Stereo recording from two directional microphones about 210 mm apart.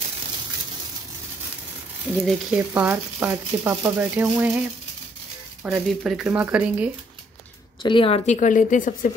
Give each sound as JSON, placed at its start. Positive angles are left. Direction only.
{"t": 2.2, "sound": "speech", "side_deg": -5}
{"t": 7.8, "sound": "a woman's voice", "side_deg": 25}